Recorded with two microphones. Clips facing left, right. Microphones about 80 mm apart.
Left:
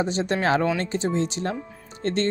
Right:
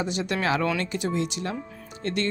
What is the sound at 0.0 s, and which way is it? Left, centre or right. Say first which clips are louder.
Speech: left 3 dB; left.